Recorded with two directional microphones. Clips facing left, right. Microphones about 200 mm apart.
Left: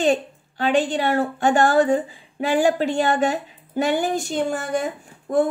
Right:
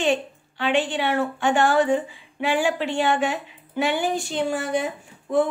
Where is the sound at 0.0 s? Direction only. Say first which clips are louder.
Left 3 dB; 40° left (ahead or behind).